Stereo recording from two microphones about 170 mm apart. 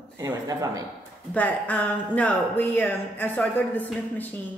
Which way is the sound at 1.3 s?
10° left (ahead or behind).